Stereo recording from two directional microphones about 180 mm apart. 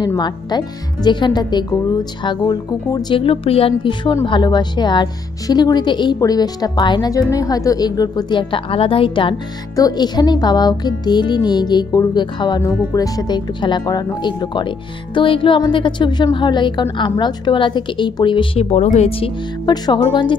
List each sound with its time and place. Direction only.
0.0 s speech: 25° left (ahead or behind)